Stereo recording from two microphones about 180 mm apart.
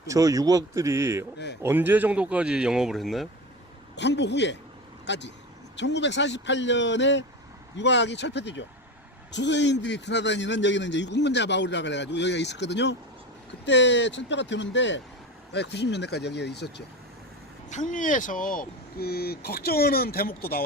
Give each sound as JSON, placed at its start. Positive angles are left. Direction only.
{"t": 0.1, "sound": "speech", "side_deg": -20}
{"t": 3.9, "sound": "a man's voice", "side_deg": 75}
{"t": 15.5, "sound": "a man's voice", "side_deg": 70}
{"t": 17.7, "sound": "speech", "side_deg": 45}